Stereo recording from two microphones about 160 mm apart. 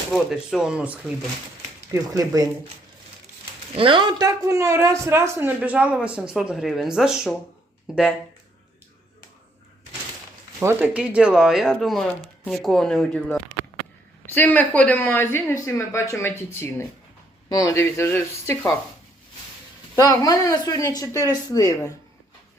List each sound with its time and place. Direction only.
0.1 s speech: centre (ahead or behind)
1.9 s speech: 20° right (ahead or behind)
3.8 s a man's voice: 30° right (ahead or behind); by 8.0 s 5° right (ahead or behind)
10.6 s a woman's voice: 15° right (ahead or behind); by 18.7 s 15° left (ahead or behind)
20.0 s speech: 20° left (ahead or behind)